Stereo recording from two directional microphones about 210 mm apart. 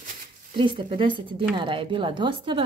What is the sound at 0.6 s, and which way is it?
A woman's voice, 25° right (ahead or behind).